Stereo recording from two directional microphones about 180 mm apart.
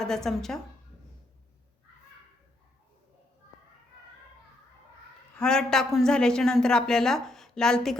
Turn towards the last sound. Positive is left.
turn(degrees=5)  # may be behind; listen again after turning